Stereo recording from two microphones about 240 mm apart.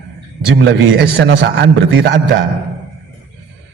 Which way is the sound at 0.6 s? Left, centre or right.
Right.